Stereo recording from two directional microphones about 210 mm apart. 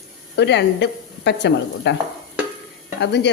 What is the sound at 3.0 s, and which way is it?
Speech, 55° left (ahead or behind).